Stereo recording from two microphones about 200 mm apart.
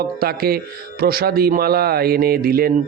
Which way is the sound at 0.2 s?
50° right (ahead or behind).